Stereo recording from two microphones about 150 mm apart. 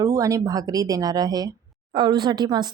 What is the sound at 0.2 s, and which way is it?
Speech, 20° right (ahead or behind).